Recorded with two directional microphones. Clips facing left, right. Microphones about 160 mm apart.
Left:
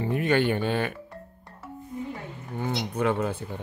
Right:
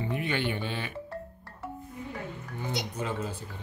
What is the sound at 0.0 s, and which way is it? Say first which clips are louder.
Speech: left 7 dB; 45° left (ahead or behind).